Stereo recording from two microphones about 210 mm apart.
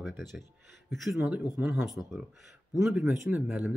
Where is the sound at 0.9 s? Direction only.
Centre (ahead or behind).